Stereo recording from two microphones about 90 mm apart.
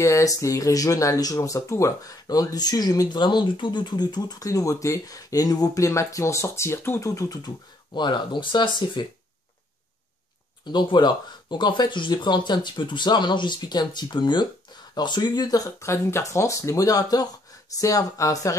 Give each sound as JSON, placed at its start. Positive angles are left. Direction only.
{"t": 0.0, "sound": "speech", "side_deg": 35}
{"t": 7.4, "sound": "speech", "side_deg": 55}
{"t": 10.6, "sound": "speech", "side_deg": 60}